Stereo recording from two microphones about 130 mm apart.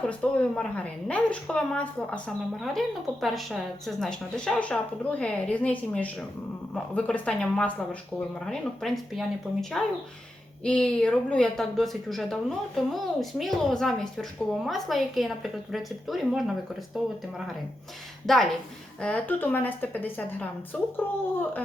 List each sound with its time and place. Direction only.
0.1 s a woman's voice: 10° left (ahead or behind)
18.3 s a woman's voice: 5° left (ahead or behind)